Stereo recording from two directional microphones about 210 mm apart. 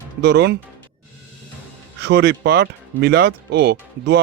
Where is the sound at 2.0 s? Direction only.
55° right (ahead or behind).